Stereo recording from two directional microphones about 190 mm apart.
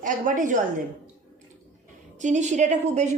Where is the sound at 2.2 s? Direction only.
40° right (ahead or behind).